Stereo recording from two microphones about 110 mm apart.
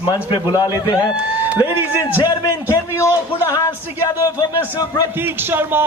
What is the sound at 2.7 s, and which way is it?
Speech, 25° left (ahead or behind).